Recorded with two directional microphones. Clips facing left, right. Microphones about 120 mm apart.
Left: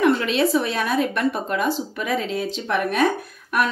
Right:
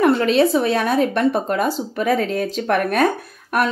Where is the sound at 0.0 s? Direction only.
35° right (ahead or behind).